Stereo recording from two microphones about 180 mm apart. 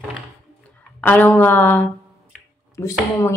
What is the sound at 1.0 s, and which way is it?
Speech, 10° left (ahead or behind).